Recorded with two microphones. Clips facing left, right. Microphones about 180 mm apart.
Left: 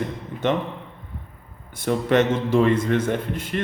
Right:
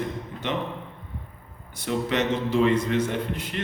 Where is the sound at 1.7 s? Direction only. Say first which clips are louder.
Left 6 dB; 50° left (ahead or behind).